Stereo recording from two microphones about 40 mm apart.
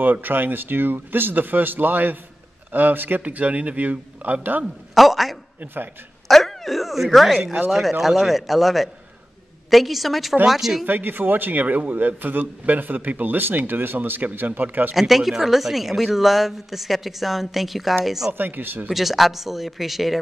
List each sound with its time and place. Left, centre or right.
0.0 s a man's voice: right
3.2 s a man's voice: right
4.9 s speech: centre
6.2 s cat: centre
8.3 s speech: centre
10.9 s a man's voice: right
11.6 s a man's voice: right
15.0 s speech: centre
18.4 s speech: right
18.9 s speech: centre